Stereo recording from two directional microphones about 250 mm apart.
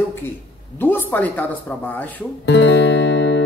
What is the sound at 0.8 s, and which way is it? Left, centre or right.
Speech, centre.